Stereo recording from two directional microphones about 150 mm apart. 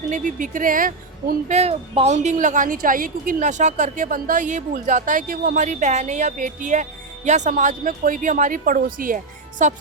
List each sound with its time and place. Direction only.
0.1 s a woman's voice: 60° right (ahead or behind)
1.5 s a woman's voice: 45° right (ahead or behind)